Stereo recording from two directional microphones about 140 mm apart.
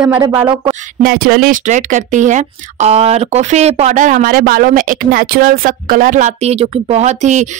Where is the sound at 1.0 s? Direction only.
90° right.